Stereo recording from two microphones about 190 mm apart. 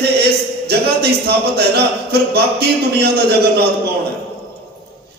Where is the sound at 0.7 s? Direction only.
60° right (ahead or behind).